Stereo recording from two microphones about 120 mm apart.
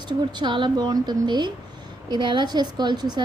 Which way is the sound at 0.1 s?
40° right (ahead or behind).